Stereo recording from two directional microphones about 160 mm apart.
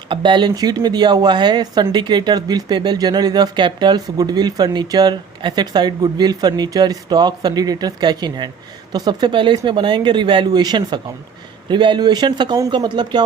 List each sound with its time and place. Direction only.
0.1 s speech: 30° right (ahead or behind)